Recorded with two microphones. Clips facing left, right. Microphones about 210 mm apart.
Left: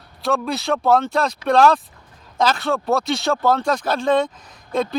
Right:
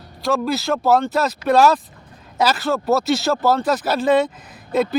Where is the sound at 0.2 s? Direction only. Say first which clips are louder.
Right 2 dB; centre (ahead or behind).